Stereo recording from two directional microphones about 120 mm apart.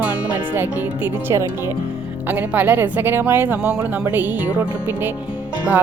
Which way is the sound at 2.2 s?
15° right (ahead or behind).